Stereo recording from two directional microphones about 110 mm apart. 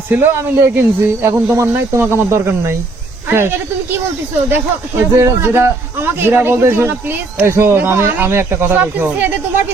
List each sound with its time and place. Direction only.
0.1 s speech: 15° right (ahead or behind)